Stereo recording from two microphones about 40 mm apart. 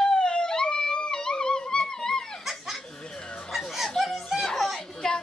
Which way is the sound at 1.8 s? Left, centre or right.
Centre.